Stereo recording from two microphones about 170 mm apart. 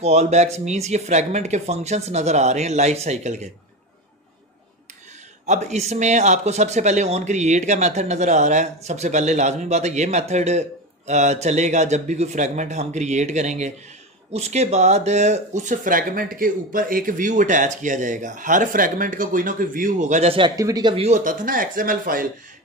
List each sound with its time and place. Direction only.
0.0 s speech: 40° right (ahead or behind)
5.5 s speech: 45° right (ahead or behind); by 20.9 s 20° right (ahead or behind)
20.9 s speech: 40° right (ahead or behind)